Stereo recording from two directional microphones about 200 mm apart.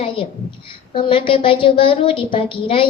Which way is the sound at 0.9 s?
25° left (ahead or behind).